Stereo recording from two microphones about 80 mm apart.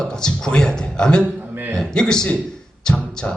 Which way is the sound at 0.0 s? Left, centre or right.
Centre.